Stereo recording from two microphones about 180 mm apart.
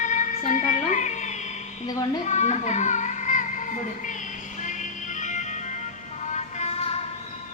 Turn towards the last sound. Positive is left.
turn(degrees=35)  # may be behind; listen again after turning